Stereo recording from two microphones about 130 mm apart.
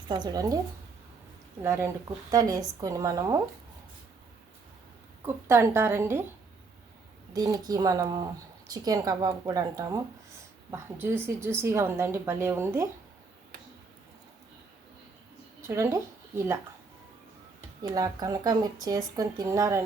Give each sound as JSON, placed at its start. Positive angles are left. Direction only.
{"t": 0.1, "sound": "speech", "side_deg": -30}
{"t": 1.6, "sound": "speech", "side_deg": -20}
{"t": 5.2, "sound": "speech", "side_deg": -20}
{"t": 7.3, "sound": "speech", "side_deg": -30}
{"t": 15.6, "sound": "speech", "side_deg": -20}
{"t": 17.8, "sound": "speech", "side_deg": -30}